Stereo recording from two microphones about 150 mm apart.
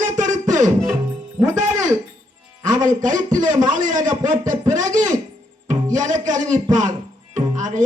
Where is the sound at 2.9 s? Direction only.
60° right (ahead or behind).